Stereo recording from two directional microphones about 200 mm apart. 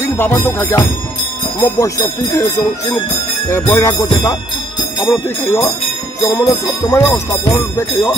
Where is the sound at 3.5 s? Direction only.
15° left (ahead or behind).